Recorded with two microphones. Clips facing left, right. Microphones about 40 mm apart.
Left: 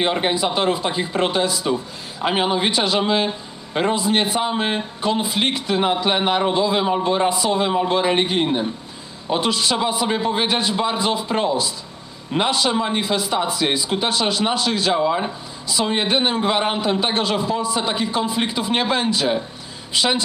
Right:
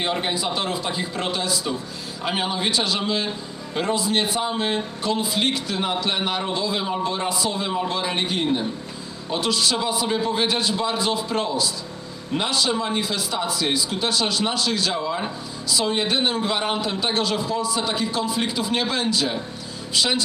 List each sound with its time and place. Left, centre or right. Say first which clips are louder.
0.0 s a man's voice: left 5 dB; left